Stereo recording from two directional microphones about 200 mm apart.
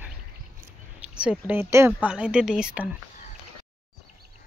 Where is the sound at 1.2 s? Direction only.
5° right (ahead or behind).